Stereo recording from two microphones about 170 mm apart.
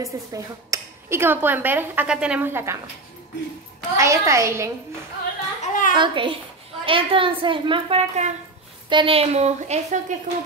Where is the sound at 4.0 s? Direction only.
20° right (ahead or behind).